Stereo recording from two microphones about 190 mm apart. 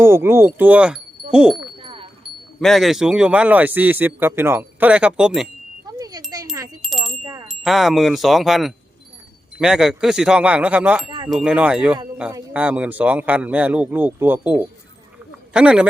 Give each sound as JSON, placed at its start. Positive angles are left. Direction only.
{"t": 0.0, "sound": "a man's voice", "side_deg": -15}
{"t": 1.8, "sound": "a sound", "side_deg": -30}
{"t": 2.6, "sound": "a man's voice", "side_deg": 0}
{"t": 6.0, "sound": "wind chime", "side_deg": -20}
{"t": 6.8, "sound": "wind chime", "side_deg": 0}
{"t": 7.4, "sound": "a man's voice", "side_deg": 0}